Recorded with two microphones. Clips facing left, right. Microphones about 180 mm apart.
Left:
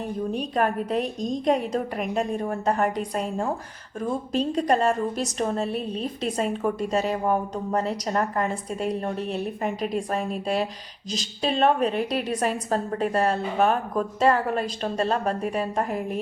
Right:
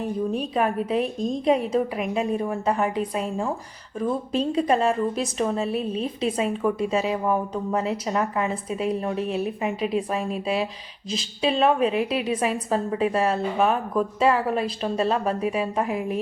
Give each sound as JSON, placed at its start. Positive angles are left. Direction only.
{"t": 0.0, "sound": "a woman's voice", "side_deg": 0}